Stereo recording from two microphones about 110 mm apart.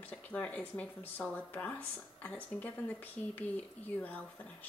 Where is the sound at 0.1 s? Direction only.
10° left (ahead or behind).